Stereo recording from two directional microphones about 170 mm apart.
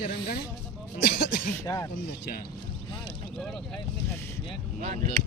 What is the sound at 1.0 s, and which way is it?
Speech, 90° left.